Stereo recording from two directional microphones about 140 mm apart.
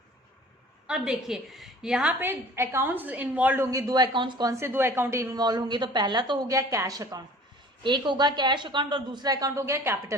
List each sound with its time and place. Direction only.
0.9 s a woman's voice: 5° right (ahead or behind); by 4.5 s 30° right (ahead or behind)
4.6 s a woman's voice: 15° right (ahead or behind)